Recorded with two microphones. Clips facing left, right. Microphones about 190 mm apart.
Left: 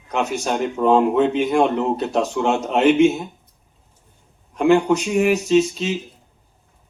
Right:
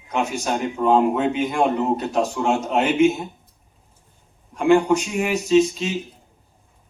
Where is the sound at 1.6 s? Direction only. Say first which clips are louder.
Left 2 dB; 35° left (ahead or behind).